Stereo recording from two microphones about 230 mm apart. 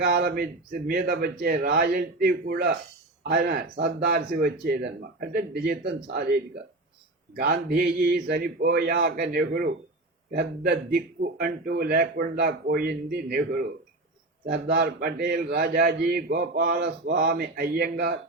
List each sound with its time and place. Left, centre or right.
0.0 s speech: right
7.3 s a man's voice: right